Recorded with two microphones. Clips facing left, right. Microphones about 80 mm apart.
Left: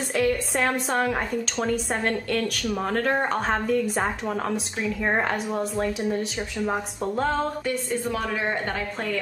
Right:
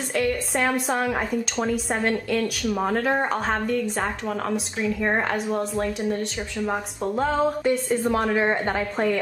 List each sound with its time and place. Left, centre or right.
0.1 s speech: centre
7.6 s a woman's voice: right